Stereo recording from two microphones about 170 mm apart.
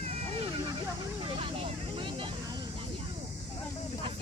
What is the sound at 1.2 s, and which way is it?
Vehicle, 35° right (ahead or behind).